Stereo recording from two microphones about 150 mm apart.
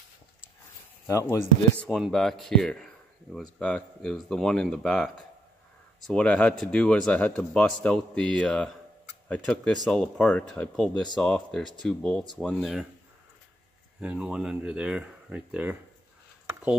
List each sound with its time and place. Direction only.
1.0 s speech: 20° left (ahead or behind)
1.9 s speech: centre (ahead or behind)
14.0 s speech: 5° right (ahead or behind)